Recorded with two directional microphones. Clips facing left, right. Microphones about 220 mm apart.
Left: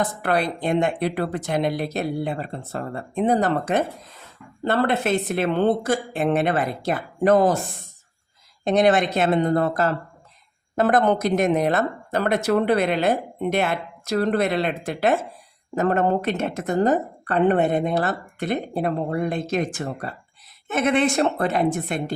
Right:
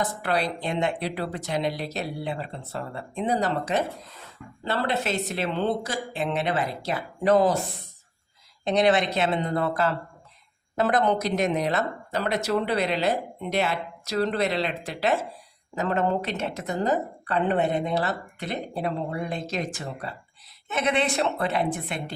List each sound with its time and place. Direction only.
0.0 s speech: 55° left (ahead or behind)
8.6 s speech: 50° left (ahead or behind)